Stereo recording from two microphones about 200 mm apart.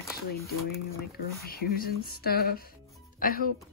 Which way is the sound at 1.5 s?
50° left (ahead or behind).